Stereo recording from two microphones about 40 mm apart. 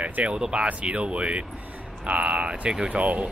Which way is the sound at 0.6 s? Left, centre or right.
Right.